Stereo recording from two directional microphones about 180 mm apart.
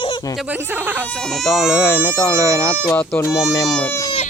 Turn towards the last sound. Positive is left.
turn(degrees=10)  # may be behind; listen again after turning